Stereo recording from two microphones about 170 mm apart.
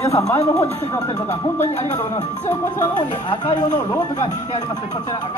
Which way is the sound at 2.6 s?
25° left (ahead or behind).